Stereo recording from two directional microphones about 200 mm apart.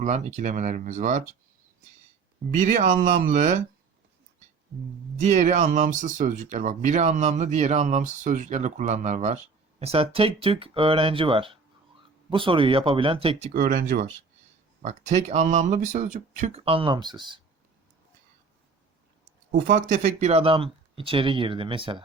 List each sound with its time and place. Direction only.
0.0 s speech: 35° right (ahead or behind)
2.6 s speech: 40° right (ahead or behind)
5.1 s speech: 35° right (ahead or behind)
13.5 s speech: 45° right (ahead or behind)
14.8 s speech: 35° right (ahead or behind)
19.5 s speech: 40° right (ahead or behind); by 22.0 s 25° right (ahead or behind)